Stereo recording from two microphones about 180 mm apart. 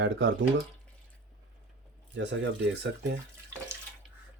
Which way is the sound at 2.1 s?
85° right.